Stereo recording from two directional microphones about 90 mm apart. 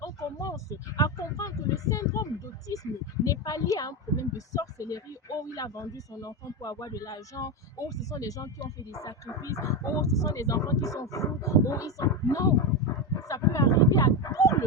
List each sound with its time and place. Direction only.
0.0 s speech: 40° left (ahead or behind)